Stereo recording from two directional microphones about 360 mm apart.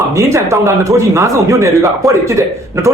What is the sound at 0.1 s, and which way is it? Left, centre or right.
Speech, centre.